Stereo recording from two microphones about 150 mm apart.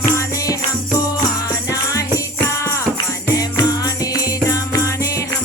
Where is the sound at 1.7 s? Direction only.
20° left (ahead or behind).